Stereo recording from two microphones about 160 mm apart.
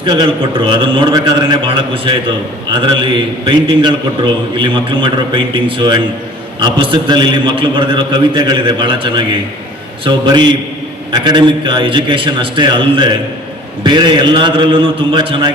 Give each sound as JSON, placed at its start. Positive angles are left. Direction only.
{"t": 0.0, "sound": "a man's voice", "side_deg": -30}